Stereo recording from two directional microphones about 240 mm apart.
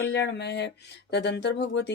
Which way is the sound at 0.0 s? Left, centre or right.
Left.